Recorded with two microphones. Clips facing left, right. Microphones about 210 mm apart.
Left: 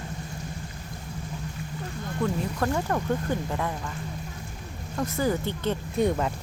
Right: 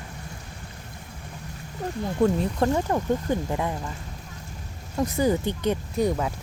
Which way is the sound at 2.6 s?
20° right (ahead or behind).